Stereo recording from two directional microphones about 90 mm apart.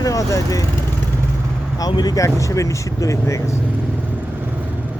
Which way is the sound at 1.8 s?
50° left (ahead or behind).